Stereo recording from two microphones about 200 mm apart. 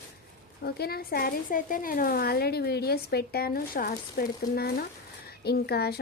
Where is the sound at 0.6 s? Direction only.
50° left (ahead or behind).